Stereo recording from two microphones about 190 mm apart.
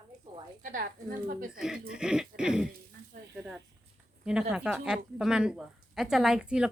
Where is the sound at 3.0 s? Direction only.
50° right (ahead or behind).